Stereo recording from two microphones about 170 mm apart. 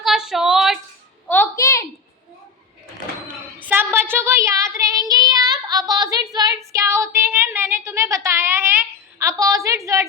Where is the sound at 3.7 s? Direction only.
10° right (ahead or behind).